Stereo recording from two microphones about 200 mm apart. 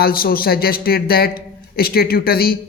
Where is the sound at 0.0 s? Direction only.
50° left (ahead or behind).